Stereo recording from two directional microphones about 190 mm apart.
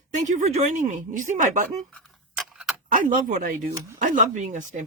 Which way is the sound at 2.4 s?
Centre (ahead or behind).